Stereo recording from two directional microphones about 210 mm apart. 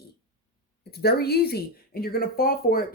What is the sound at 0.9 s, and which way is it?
Speech, 50° left (ahead or behind).